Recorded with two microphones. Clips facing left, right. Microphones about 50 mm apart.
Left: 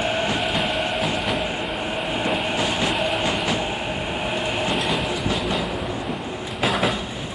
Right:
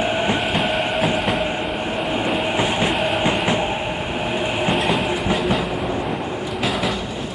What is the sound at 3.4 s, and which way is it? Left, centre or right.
Train, right.